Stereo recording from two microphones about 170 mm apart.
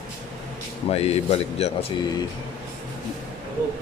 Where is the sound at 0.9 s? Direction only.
40° left (ahead or behind).